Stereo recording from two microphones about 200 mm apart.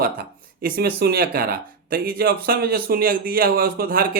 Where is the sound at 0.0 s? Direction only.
45° right (ahead or behind).